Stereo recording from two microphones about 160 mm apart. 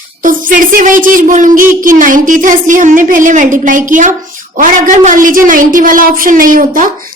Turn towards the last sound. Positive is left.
turn(degrees=-60)  # may be behind; listen again after turning